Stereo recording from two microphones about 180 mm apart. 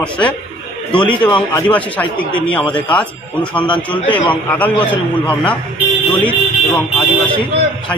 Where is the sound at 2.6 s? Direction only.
25° left (ahead or behind).